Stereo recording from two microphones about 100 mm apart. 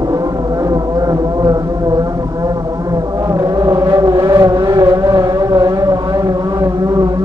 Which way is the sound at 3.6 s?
40° right (ahead or behind).